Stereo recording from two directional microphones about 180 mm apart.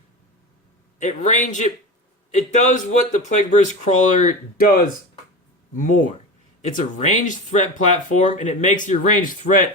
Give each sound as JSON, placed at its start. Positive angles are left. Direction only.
{"t": 0.9, "sound": "a man's voice", "side_deg": 40}